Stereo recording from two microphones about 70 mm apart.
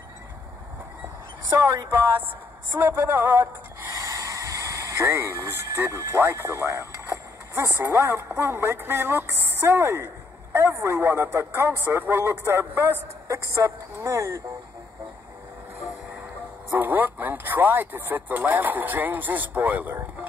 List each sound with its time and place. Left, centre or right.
2.8 s speech: right
3.9 s a sound: right
7.5 s a woman's voice: right
16.7 s speech: right